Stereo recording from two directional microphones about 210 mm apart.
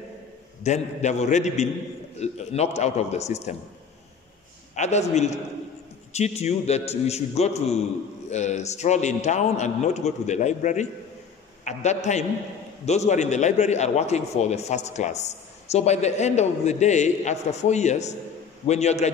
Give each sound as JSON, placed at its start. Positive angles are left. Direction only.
{"t": 0.7, "sound": "a man's voice", "side_deg": 30}
{"t": 4.7, "sound": "a man's voice", "side_deg": 35}